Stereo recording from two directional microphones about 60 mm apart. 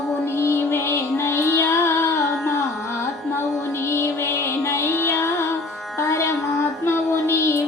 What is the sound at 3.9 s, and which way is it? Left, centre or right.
Music, left.